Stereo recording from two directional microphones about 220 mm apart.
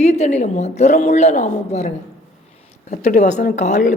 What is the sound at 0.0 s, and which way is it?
Speech, 30° left (ahead or behind).